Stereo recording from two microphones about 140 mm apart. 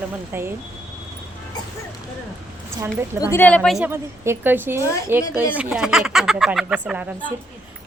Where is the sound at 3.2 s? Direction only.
20° left (ahead or behind).